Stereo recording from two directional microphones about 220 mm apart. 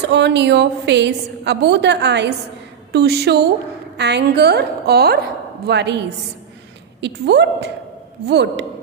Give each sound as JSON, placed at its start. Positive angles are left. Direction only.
{"t": 0.0, "sound": "a woman's voice", "side_deg": -50}